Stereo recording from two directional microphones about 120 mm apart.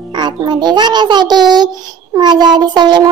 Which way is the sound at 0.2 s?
35° right (ahead or behind).